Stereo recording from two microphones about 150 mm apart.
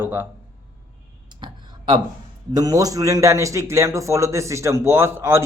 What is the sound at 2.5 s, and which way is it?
A man's voice, 25° right (ahead or behind).